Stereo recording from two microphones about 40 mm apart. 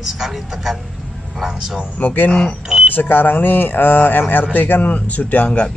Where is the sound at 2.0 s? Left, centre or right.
Left.